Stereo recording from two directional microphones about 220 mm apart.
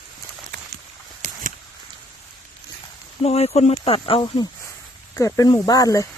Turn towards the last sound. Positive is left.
turn(degrees=15)  # may be behind; listen again after turning